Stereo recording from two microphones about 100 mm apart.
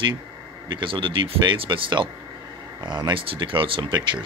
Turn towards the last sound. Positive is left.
turn(degrees=-50)  # may be behind; listen again after turning